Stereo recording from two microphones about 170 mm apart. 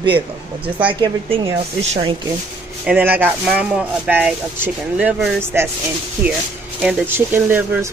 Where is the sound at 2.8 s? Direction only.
10° right (ahead or behind).